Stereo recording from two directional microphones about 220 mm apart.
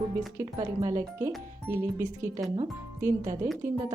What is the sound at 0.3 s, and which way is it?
A woman's voice, 15° right (ahead or behind).